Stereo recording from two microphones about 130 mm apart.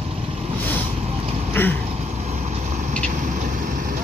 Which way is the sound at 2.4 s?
65° right (ahead or behind).